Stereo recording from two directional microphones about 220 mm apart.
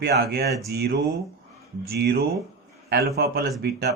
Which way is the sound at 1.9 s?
45° right (ahead or behind).